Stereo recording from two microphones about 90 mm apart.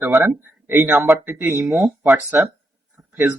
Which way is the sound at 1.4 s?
25° right (ahead or behind).